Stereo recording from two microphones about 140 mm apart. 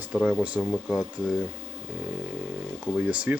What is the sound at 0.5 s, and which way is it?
Speech, 10° left (ahead or behind).